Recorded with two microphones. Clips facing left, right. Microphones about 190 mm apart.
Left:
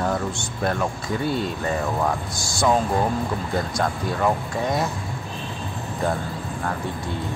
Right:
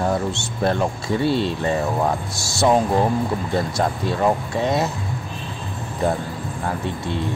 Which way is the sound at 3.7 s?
25° right (ahead or behind).